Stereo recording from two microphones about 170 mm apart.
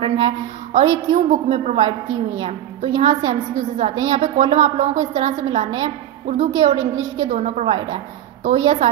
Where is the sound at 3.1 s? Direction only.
40° right (ahead or behind).